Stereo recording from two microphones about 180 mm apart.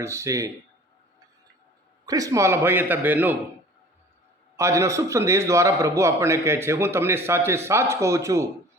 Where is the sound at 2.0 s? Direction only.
20° right (ahead or behind).